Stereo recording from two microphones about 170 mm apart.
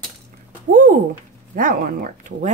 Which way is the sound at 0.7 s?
50° right (ahead or behind).